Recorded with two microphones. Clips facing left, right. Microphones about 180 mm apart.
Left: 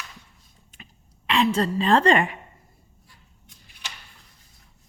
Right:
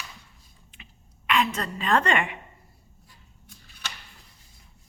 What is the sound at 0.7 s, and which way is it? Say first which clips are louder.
Throat clearing: left 3 dB; 40° left (ahead or behind).